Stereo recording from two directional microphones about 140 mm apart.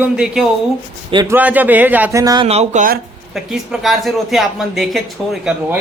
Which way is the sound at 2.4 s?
50° right (ahead or behind).